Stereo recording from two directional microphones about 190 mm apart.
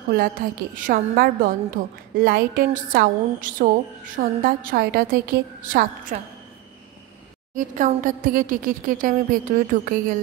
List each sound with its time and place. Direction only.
0.7 s a woman's voice: 50° right (ahead or behind)
7.5 s a woman's voice: 45° right (ahead or behind)